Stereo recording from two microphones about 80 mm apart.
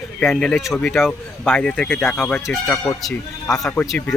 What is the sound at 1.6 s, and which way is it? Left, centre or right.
Speech, centre.